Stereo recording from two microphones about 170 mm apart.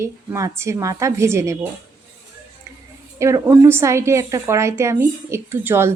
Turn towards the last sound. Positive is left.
turn(degrees=-15)  # may be behind; listen again after turning